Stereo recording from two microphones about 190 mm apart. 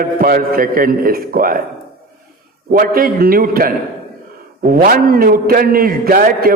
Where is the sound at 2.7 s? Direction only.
50° right (ahead or behind).